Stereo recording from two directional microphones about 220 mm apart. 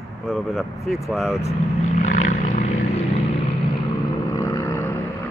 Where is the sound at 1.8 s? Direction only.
35° left (ahead or behind).